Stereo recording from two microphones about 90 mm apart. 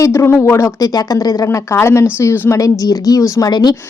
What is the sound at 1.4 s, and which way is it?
Speech, 30° left (ahead or behind).